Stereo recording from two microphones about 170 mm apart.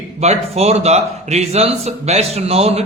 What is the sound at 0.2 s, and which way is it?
A man's voice, 40° right (ahead or behind).